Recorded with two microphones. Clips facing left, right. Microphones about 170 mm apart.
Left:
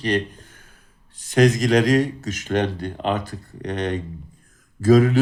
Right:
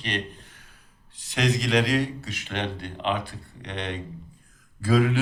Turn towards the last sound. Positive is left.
turn(degrees=40)  # may be behind; listen again after turning